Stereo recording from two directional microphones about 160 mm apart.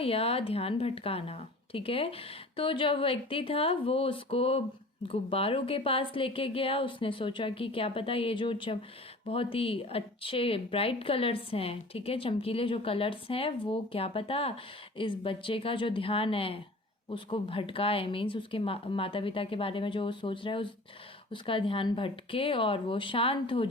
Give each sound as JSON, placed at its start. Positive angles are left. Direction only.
{"t": 0.0, "sound": "speech", "side_deg": 35}